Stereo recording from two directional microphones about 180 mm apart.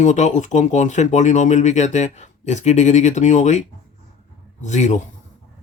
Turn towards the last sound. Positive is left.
turn(degrees=40)  # may be behind; listen again after turning